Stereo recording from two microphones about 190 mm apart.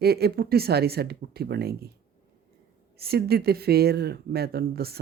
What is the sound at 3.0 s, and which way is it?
Speech, 55° right (ahead or behind).